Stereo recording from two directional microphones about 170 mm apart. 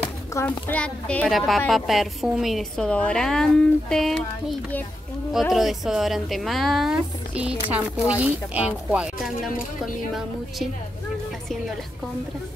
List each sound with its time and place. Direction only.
0.0 s speech: 15° left (ahead or behind); by 10.7 s centre (ahead or behind)